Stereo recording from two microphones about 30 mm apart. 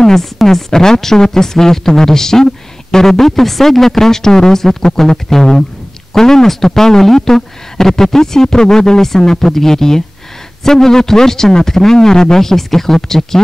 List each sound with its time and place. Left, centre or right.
0.0 s speech: centre